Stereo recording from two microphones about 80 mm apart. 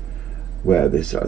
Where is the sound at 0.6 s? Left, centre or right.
Centre.